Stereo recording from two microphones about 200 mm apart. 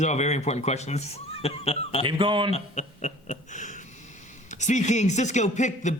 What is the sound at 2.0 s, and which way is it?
Speech, 25° right (ahead or behind).